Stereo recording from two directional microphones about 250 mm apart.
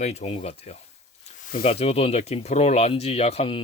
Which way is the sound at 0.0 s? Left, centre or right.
Left.